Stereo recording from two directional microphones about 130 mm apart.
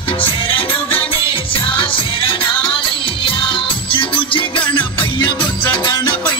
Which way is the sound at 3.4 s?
40° left (ahead or behind).